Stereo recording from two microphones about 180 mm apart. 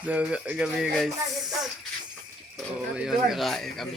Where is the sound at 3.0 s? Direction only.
Centre (ahead or behind).